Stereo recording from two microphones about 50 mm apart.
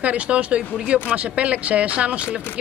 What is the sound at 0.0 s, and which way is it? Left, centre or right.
Speech, right.